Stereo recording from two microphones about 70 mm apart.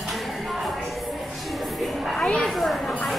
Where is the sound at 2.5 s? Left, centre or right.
Centre.